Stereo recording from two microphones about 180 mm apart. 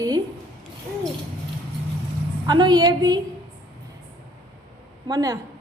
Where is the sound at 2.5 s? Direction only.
25° right (ahead or behind).